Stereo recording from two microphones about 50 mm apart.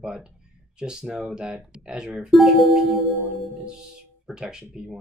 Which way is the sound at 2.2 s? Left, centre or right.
Centre.